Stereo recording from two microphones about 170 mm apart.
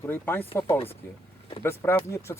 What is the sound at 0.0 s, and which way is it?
Speech, 10° left (ahead or behind).